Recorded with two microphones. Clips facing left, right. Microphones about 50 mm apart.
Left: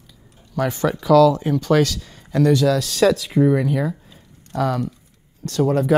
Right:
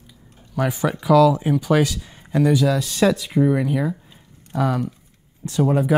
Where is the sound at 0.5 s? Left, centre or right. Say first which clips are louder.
Left 1 dB; centre.